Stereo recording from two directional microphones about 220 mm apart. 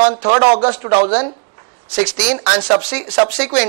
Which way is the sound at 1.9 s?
10° right (ahead or behind).